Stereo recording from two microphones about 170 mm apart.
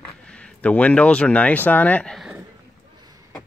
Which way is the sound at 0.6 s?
10° left (ahead or behind).